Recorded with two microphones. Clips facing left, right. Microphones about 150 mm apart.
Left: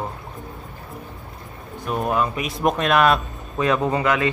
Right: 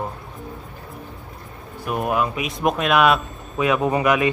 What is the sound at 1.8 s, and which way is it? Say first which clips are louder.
Speech: even; 10° right (ahead or behind).